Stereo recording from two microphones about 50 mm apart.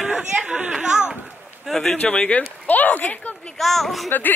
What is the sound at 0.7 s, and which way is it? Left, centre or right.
Speech, centre.